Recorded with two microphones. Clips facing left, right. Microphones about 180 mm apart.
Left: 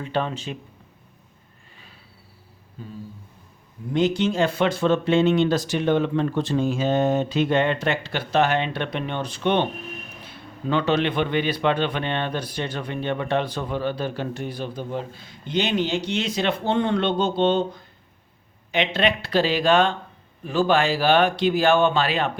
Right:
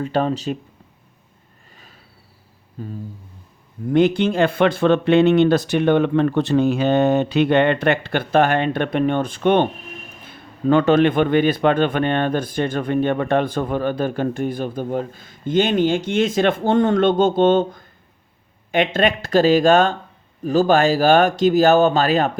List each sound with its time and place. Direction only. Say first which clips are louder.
0.0 s speech: right 6 dB; 40° right (ahead or behind)
1.7 s a sound: right 2 dB; 40° right (ahead or behind)
3.9 s speech: right 5 dB; 55° right (ahead or behind)